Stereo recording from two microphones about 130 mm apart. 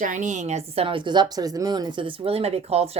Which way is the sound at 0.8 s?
40° right (ahead or behind).